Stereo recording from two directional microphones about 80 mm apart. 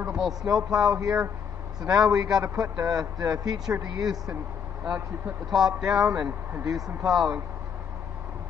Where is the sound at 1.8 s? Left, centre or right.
Right.